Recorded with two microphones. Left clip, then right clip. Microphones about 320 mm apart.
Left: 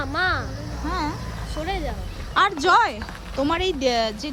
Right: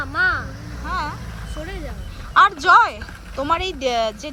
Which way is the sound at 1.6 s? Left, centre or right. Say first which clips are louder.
Left 6 dB; centre.